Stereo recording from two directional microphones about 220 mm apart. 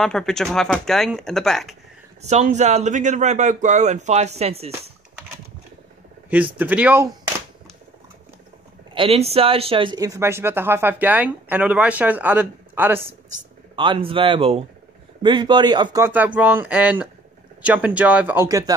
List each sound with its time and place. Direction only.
0.0 s speech: centre (ahead or behind)
2.2 s a man's voice: 30° right (ahead or behind)
6.3 s speech: 5° right (ahead or behind)
8.9 s speech: 25° right (ahead or behind); by 13.1 s 10° right (ahead or behind)
13.7 s speech: 25° right (ahead or behind)